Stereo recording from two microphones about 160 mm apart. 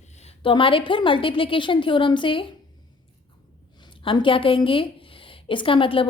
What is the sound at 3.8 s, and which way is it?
A woman's voice, 30° left (ahead or behind).